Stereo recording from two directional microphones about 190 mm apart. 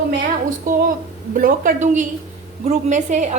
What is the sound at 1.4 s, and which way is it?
A woman's voice, 45° right (ahead or behind).